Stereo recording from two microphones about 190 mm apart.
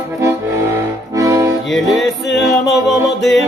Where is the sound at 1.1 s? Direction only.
15° right (ahead or behind).